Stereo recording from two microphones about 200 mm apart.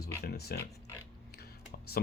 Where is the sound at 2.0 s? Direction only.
50° left (ahead or behind).